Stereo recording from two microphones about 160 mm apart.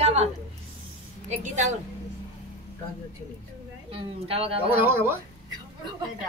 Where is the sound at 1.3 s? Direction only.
45° right (ahead or behind).